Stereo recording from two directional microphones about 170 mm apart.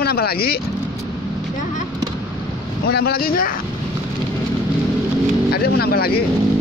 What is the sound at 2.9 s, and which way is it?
Speech, 65° left (ahead or behind).